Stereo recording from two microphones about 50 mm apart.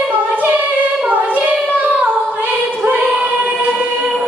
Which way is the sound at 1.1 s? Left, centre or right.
Right.